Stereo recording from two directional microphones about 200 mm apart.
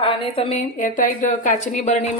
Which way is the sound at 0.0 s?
25° left (ahead or behind).